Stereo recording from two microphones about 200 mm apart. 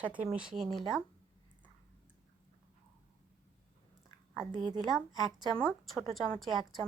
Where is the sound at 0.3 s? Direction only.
5° right (ahead or behind).